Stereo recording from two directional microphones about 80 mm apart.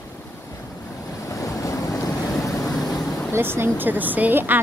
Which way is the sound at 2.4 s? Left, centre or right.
Left.